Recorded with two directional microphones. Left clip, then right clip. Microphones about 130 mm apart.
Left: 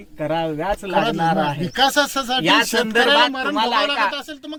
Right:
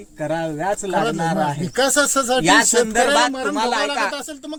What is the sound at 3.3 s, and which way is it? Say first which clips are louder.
Speech: even; 45° right (ahead or behind).